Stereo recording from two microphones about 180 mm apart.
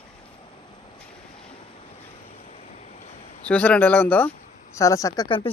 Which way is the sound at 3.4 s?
5° left (ahead or behind).